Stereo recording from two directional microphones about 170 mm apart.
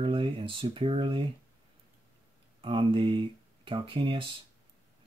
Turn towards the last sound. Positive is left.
turn(degrees=-30)  # may be behind; listen again after turning